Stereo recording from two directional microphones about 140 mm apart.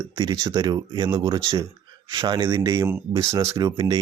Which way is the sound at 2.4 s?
20° right (ahead or behind).